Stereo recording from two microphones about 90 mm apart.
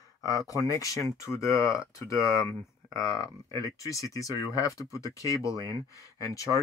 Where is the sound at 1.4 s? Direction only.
35° left (ahead or behind).